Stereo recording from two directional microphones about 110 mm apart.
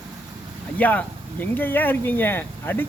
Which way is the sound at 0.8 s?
15° left (ahead or behind).